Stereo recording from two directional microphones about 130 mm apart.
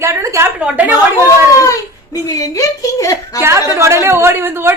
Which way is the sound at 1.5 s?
25° left (ahead or behind).